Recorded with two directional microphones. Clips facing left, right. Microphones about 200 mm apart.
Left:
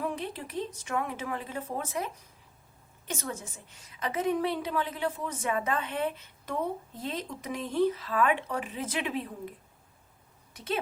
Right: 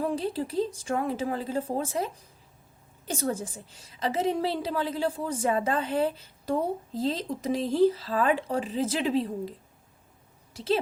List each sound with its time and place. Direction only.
0.0 s a woman's voice: 30° right (ahead or behind)